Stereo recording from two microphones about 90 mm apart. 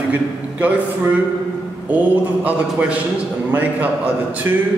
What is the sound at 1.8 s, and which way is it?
A man's voice, 15° right (ahead or behind).